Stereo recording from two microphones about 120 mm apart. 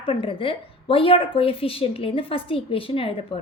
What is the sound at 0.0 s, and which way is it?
A woman's voice, 50° left (ahead or behind).